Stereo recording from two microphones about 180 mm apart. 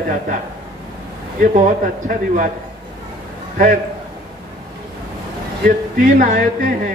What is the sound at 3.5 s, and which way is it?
Speech, 50° right (ahead or behind).